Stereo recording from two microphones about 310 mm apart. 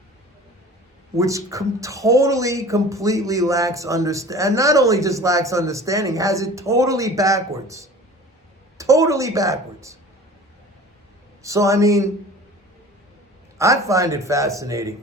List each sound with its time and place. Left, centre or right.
1.1 s a woman's voice: centre
11.4 s speech: centre
13.6 s speech: centre